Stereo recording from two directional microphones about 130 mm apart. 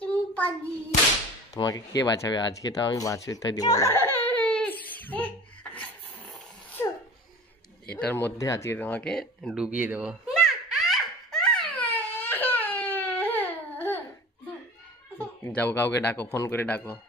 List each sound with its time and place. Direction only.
0.0 s hands: 10° left (ahead or behind)
1.5 s speech: 25° left (ahead or behind); by 5.8 s 10° left (ahead or behind)
6.8 s sneeze: 15° left (ahead or behind)
8.0 s speech: 15° left (ahead or behind)
9.8 s baby laughter: 10° right (ahead or behind); by 11.8 s 5° left (ahead or behind)
12.1 s baby cry: 15° left (ahead or behind)
15.1 s speech: 15° left (ahead or behind)